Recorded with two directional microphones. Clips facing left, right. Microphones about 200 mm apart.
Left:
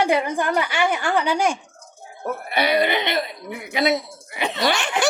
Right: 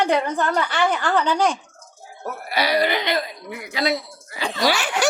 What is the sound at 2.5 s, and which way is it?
Speech, 25° left (ahead or behind).